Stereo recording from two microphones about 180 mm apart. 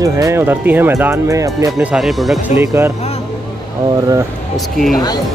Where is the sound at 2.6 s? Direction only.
15° right (ahead or behind).